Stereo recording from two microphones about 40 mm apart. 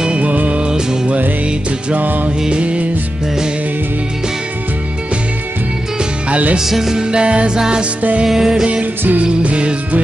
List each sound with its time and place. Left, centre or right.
0.0 s music: right
2.0 s music: right
2.5 s music: right
6.6 s music: centre
9.2 s music: right